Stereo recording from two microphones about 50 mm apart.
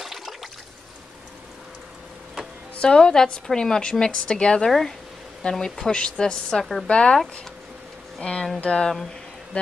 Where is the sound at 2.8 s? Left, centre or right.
Centre.